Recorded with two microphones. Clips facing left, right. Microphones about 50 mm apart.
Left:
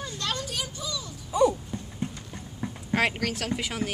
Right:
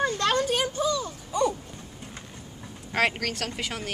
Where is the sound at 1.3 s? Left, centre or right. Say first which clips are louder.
Left 3 dB; centre.